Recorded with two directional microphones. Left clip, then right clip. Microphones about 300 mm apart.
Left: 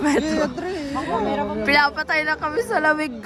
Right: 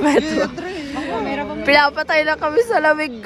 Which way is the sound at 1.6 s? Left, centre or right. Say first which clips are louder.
Right 5 dB; centre.